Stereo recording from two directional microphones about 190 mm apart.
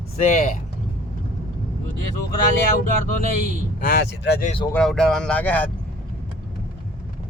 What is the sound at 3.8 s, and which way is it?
Speech, 55° left (ahead or behind).